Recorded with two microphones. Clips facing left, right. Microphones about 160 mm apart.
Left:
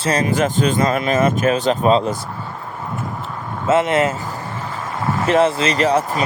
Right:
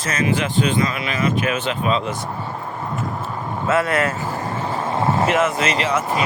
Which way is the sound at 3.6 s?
25° left (ahead or behind).